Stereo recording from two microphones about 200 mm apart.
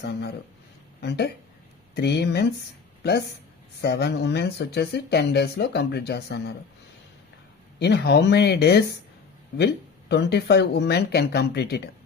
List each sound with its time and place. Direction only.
0.0 s speech: 55° left (ahead or behind)
7.8 s speech: 55° left (ahead or behind)
10.1 s speech: 55° left (ahead or behind)